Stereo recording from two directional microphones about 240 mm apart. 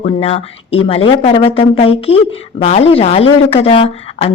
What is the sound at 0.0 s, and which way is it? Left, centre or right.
Speech, left.